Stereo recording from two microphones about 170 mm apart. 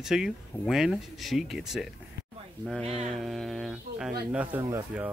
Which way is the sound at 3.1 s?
Centre (ahead or behind).